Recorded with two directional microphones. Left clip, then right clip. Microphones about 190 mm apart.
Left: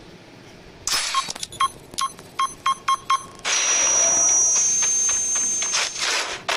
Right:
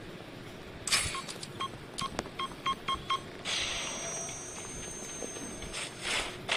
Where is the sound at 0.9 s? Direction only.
50° left (ahead or behind).